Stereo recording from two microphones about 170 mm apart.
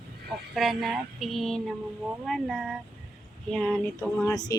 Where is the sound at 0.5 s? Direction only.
Centre (ahead or behind).